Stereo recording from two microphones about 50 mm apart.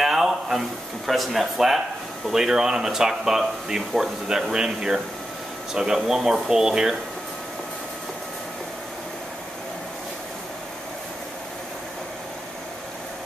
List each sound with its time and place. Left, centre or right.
0.0 s speech: centre